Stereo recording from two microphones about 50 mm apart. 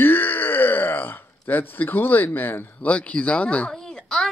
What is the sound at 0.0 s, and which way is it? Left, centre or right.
Groan, left.